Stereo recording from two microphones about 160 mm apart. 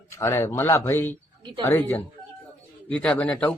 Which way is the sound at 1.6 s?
15° left (ahead or behind).